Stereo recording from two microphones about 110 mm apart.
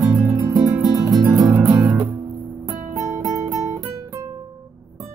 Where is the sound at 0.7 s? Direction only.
35° right (ahead or behind).